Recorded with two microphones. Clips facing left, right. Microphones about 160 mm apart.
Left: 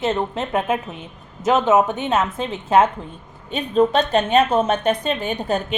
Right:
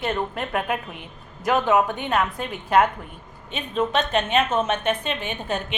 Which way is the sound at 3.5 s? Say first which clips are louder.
Left 7 dB; 35° left (ahead or behind).